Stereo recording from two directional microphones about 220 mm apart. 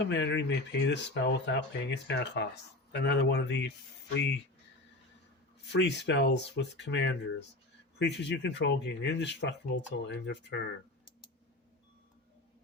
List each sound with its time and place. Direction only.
0.0 s speech: 55° left (ahead or behind)
5.7 s speech: 50° left (ahead or behind)